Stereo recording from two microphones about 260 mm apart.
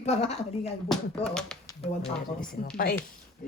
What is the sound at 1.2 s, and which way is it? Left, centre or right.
Speech, centre.